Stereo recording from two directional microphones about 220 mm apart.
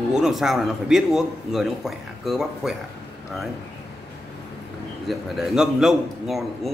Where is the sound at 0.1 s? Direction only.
Centre (ahead or behind).